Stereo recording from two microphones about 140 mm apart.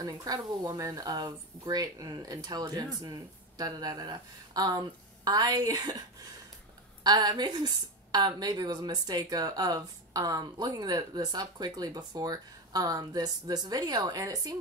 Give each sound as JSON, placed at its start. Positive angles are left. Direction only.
{"t": 0.0, "sound": "a woman's voice", "side_deg": -25}